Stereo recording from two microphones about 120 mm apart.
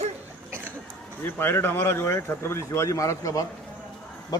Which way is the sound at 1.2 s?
15° left (ahead or behind).